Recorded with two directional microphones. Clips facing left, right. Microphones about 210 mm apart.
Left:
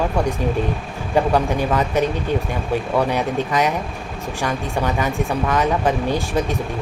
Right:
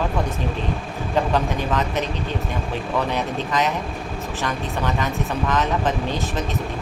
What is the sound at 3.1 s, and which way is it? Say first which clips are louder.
Speech: left 4 dB; 15° left (ahead or behind).